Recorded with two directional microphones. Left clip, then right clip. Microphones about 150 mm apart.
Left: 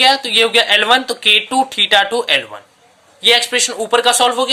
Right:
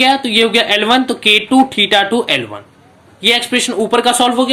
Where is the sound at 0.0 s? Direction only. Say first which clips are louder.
Even; 40° left (ahead or behind).